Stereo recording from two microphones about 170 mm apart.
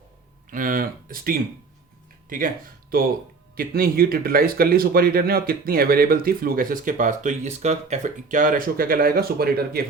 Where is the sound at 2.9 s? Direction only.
60° right (ahead or behind).